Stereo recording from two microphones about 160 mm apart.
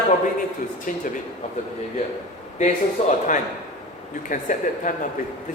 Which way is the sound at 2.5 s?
45° left (ahead or behind).